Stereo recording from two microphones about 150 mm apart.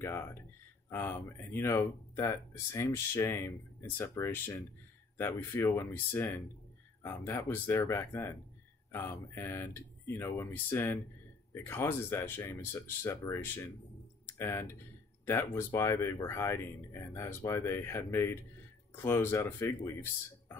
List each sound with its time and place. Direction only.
0.0 s speech: 15° left (ahead or behind)